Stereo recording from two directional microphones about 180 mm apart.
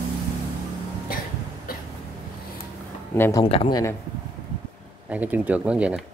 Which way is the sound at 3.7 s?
15° left (ahead or behind).